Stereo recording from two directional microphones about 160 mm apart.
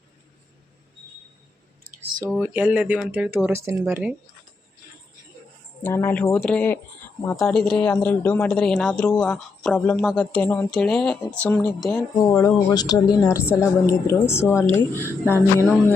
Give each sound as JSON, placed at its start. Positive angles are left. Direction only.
{"t": 2.4, "sound": "speech", "side_deg": -10}
{"t": 5.8, "sound": "a woman's voice", "side_deg": 15}
{"t": 12.3, "sound": "a woman's voice", "side_deg": 20}